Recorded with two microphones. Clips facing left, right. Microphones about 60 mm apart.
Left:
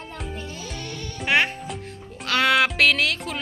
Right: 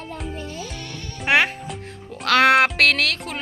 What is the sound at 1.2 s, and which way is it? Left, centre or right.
Speech, right.